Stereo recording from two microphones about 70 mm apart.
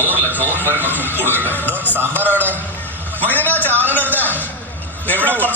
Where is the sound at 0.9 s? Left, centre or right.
Left.